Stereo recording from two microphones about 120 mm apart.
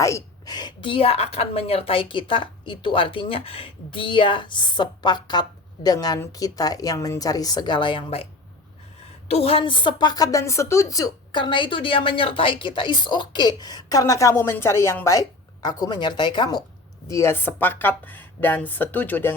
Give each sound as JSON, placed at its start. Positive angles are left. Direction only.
{"t": 0.0, "sound": "a woman's voice", "side_deg": 30}
{"t": 9.3, "sound": "a woman's voice", "side_deg": 50}
{"t": 11.3, "sound": "a woman's voice", "side_deg": 45}
{"t": 17.1, "sound": "speech", "side_deg": 25}